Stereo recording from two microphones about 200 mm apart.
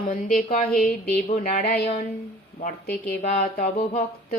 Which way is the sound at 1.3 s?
35° left (ahead or behind).